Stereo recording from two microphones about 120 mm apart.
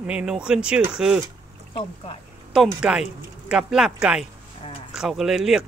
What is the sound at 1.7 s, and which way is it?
Speech, 50° left (ahead or behind).